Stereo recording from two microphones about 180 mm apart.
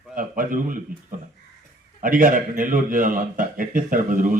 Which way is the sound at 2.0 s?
50° right (ahead or behind).